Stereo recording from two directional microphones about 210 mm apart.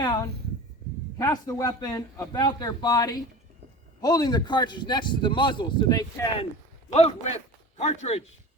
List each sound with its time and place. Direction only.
0.0 s a man's voice: 20° left (ahead or behind)
6.9 s speech: 30° left (ahead or behind)